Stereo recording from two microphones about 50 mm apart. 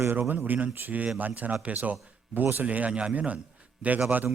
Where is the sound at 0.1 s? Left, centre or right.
Right.